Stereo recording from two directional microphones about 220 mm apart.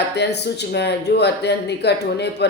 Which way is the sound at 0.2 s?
50° left (ahead or behind).